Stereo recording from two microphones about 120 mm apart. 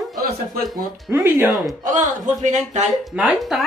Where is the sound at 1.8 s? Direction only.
90° right.